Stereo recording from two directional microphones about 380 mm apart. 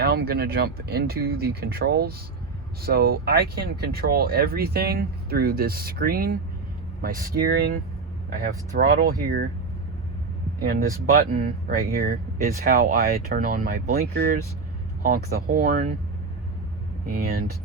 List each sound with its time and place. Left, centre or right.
0.0 s speech: right
10.7 s speech: right
17.1 s speech: right